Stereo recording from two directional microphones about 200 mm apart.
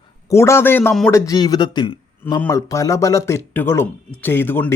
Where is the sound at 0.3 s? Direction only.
15° left (ahead or behind).